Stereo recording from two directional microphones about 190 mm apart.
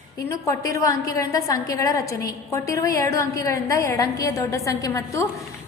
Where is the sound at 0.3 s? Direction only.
15° left (ahead or behind).